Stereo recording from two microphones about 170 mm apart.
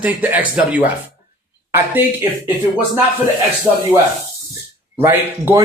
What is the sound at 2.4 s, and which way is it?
Speech, 10° right (ahead or behind).